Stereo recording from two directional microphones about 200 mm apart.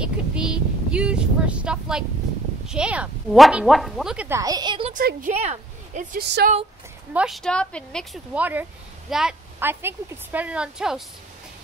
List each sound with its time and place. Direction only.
0.0 s a sound: 5° right (ahead or behind)
2.6 s speech: 5° right (ahead or behind)
4.4 s a woman's voice: 20° right (ahead or behind)
4.9 s a woman's voice: 40° right (ahead or behind)
6.1 s a woman's voice: 50° right (ahead or behind)
7.2 s a woman's voice: centre (ahead or behind)